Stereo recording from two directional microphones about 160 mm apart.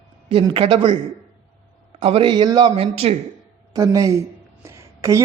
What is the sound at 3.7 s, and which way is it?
Speech, 20° right (ahead or behind).